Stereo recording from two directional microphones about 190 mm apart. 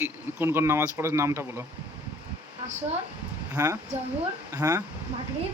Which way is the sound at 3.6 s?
15° right (ahead or behind).